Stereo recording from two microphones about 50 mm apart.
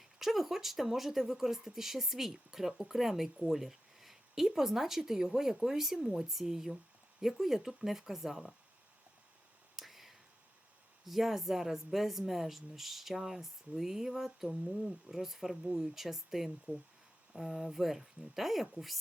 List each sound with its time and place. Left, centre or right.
0.2 s speech: centre
9.7 s a sound: centre
11.0 s speech: centre
16.7 s speech: right
17.3 s speech: centre